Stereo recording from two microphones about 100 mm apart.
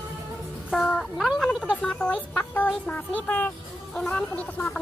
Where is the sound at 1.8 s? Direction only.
10° left (ahead or behind).